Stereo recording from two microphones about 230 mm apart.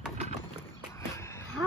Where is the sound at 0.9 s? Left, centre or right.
Centre.